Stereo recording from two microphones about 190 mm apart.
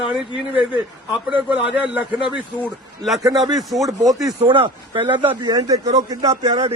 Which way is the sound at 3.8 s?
15° right (ahead or behind).